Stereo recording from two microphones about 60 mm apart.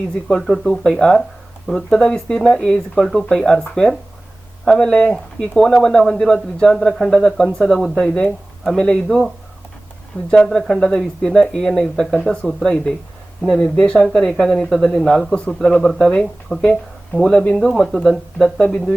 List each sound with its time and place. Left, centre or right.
0.1 s speech: centre
10.3 s speech: centre
16.5 s speech: centre
17.2 s speech: centre